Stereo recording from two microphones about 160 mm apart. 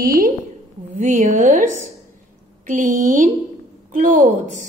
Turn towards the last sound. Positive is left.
turn(degrees=-55)  # may be behind; listen again after turning